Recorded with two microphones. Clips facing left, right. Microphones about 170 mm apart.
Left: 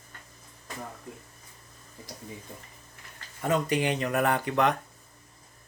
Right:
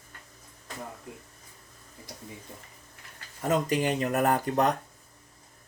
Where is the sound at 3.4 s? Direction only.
40° right (ahead or behind).